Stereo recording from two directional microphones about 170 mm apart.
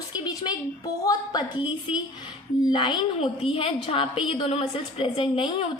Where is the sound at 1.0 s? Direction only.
25° left (ahead or behind).